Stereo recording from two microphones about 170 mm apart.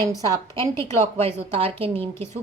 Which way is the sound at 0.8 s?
40° right (ahead or behind).